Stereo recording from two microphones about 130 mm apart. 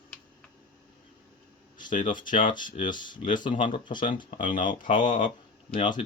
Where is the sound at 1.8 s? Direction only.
85° left.